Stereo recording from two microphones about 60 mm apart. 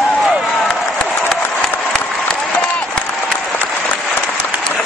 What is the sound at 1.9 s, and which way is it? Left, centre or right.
Applause, centre.